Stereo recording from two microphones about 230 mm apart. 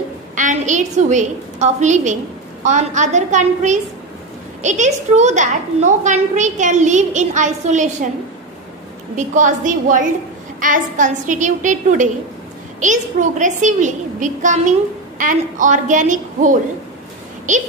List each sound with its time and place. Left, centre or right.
0.4 s a woman's voice: right
9.1 s a woman's voice: right